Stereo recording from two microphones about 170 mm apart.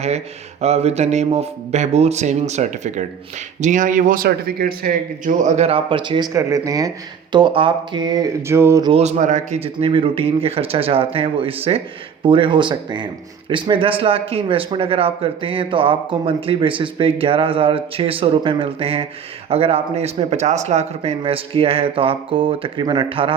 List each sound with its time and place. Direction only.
0.6 s speech: 40° right (ahead or behind); by 8.9 s 15° right (ahead or behind)
8.9 s speech: 40° right (ahead or behind)